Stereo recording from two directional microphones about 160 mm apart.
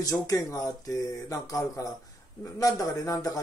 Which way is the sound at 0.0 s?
20° left (ahead or behind).